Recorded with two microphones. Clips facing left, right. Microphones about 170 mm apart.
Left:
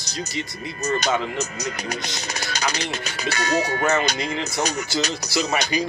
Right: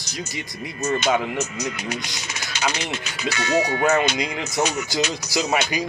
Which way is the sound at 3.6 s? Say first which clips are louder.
Right 2 dB; 15° right (ahead or behind).